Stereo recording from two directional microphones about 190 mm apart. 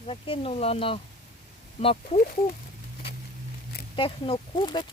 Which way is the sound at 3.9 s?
25° left (ahead or behind).